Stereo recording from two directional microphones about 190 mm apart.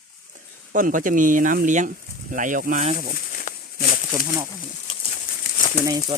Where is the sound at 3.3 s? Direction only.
45° left (ahead or behind).